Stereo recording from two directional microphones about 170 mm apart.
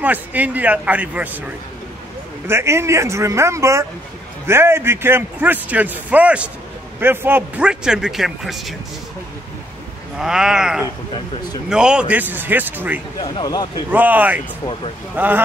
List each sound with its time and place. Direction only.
0.0 s a man's voice: 10° right (ahead or behind)
2.4 s a man's voice: 15° right (ahead or behind)
10.1 s a man's voice: 5° right (ahead or behind)
13.2 s speech: 25° left (ahead or behind)
13.9 s a man's voice: 10° right (ahead or behind)